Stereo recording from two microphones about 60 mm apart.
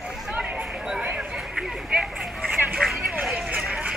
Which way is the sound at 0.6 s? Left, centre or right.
Centre.